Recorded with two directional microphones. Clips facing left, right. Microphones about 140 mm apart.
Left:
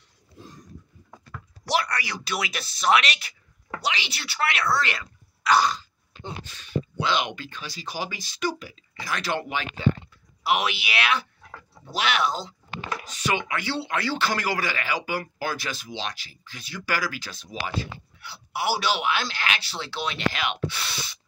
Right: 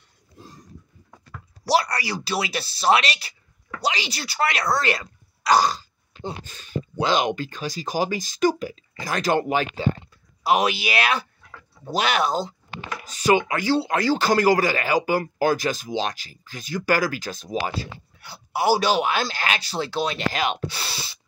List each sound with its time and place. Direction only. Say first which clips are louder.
1.6 s a man's voice: right 4 dB; 35° right (ahead or behind)